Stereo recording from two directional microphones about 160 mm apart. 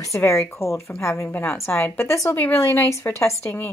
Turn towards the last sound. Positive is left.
turn(degrees=15)  # may be behind; listen again after turning